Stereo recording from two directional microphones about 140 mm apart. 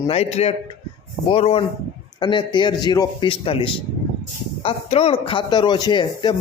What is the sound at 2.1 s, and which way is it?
Speech, 35° left (ahead or behind).